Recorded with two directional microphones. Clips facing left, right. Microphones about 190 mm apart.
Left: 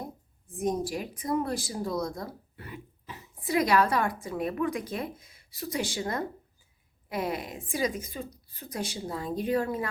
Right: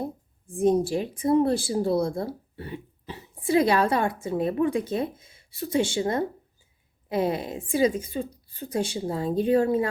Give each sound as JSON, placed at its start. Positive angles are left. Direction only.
{"t": 0.5, "sound": "speech", "side_deg": -30}